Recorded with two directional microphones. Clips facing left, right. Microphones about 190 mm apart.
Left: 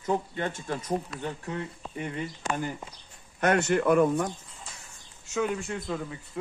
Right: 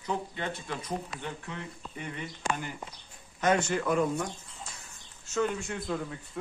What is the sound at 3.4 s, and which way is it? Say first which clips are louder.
Speech: left 3 dB; 60° left (ahead or behind).